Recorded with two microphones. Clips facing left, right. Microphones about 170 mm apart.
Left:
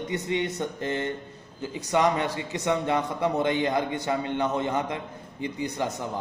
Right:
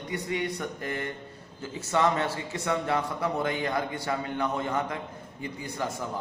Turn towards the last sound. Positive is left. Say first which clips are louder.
# left 4 dB
turn(degrees=20)  # may be behind; listen again after turning